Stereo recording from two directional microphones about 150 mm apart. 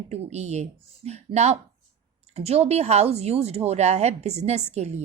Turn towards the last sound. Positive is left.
turn(degrees=-45)  # may be behind; listen again after turning